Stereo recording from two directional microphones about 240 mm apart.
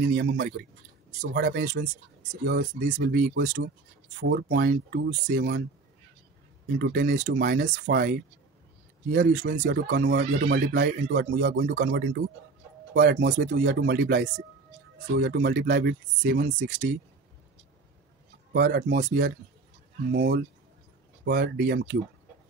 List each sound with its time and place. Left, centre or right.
0.0 s speech: right
6.8 s speech: right
18.5 s speech: right